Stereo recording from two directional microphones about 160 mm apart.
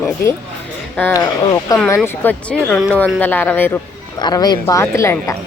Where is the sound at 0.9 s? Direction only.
10° left (ahead or behind).